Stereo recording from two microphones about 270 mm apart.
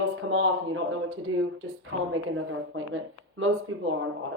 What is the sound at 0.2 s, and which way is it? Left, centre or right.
Speech, right.